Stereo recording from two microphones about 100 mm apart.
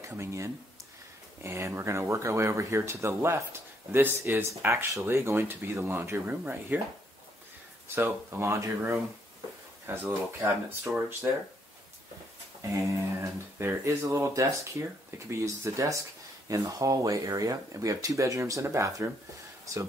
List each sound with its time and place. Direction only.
0.2 s speech: 30° right (ahead or behind)
7.9 s speech: 25° right (ahead or behind)
12.7 s a sound: 30° right (ahead or behind)
14.0 s speech: 30° right (ahead or behind)